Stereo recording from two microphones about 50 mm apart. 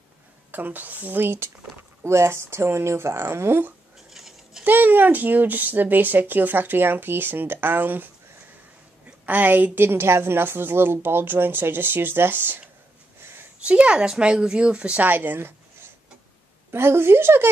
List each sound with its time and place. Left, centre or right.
0.5 s speech: right
4.1 s a sound: centre
4.6 s a woman's voice: right
9.8 s speech: right
13.6 s speech: right
15.0 s speech: right
16.7 s speech: right